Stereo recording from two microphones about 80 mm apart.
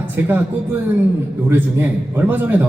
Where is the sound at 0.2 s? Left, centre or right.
Right.